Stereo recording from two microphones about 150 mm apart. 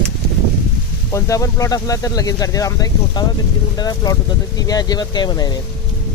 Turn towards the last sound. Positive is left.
turn(degrees=25)  # may be behind; listen again after turning